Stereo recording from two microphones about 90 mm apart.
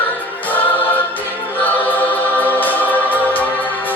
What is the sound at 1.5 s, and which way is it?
Music, 20° left (ahead or behind).